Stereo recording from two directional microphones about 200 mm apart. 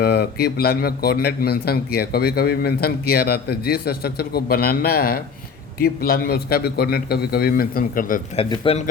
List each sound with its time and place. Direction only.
0.0 s a man's voice: 55° left (ahead or behind)
8.4 s speech: 30° left (ahead or behind)